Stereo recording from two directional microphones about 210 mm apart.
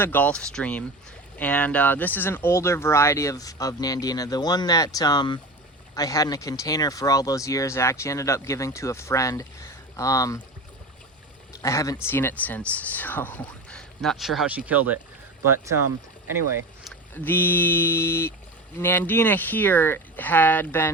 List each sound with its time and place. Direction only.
0.0 s speech: 10° left (ahead or behind)
11.6 s speech: 15° left (ahead or behind); by 15.7 s 10° right (ahead or behind)
17.2 s speech: 10° left (ahead or behind)